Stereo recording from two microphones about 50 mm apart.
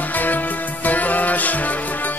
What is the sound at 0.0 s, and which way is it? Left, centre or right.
Music, left.